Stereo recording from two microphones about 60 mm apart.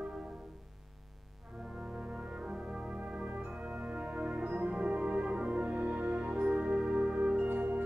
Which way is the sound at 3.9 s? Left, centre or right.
Right.